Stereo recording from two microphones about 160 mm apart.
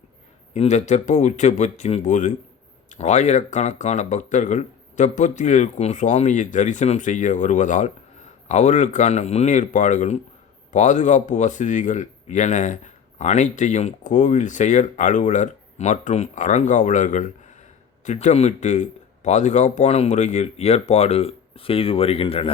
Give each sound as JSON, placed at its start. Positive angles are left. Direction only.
{"t": 0.5, "sound": "speech", "side_deg": 45}